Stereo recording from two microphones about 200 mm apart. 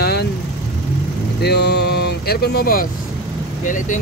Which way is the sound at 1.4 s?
55° left (ahead or behind).